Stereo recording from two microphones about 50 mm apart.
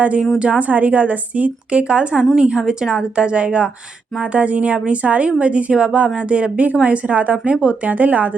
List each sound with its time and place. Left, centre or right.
0.0 s a woman's voice: right